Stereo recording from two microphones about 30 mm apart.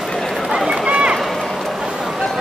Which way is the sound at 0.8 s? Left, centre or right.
Right.